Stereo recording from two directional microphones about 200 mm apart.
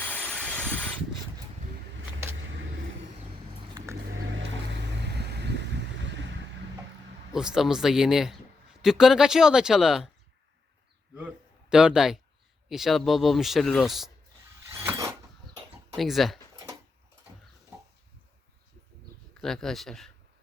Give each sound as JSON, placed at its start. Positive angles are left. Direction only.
{"t": 0.1, "sound": "vehicle", "side_deg": 5}
{"t": 4.4, "sound": "vehicle", "side_deg": -60}
{"t": 7.3, "sound": "speech", "side_deg": -5}
{"t": 11.7, "sound": "speech", "side_deg": -5}
{"t": 14.7, "sound": "a sound", "side_deg": -15}
{"t": 16.0, "sound": "speech", "side_deg": 0}
{"t": 19.3, "sound": "speech", "side_deg": 0}